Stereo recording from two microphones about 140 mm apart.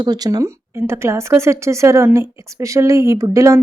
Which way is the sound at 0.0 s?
25° right (ahead or behind).